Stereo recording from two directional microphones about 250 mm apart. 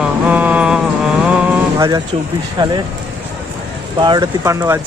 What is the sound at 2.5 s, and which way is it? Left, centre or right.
Speech, centre.